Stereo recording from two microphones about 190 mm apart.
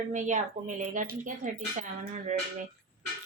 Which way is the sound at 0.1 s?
40° right (ahead or behind).